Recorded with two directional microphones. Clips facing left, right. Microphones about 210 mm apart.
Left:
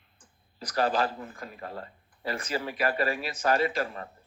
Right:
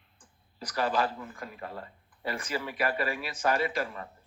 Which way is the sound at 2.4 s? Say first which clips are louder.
Left 2 dB; 35° left (ahead or behind).